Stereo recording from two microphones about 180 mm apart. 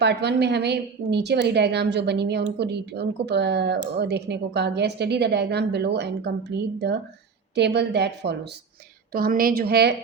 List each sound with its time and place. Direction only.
0.0 s a woman's voice: 70° right (ahead or behind)
7.5 s a woman's voice: 70° right (ahead or behind)
9.1 s a woman's voice: 55° right (ahead or behind)